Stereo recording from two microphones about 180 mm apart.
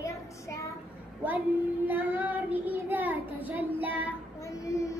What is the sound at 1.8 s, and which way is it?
Child singing, 10° right (ahead or behind).